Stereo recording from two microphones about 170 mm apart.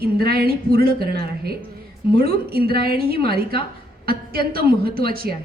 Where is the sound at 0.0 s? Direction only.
65° right (ahead or behind).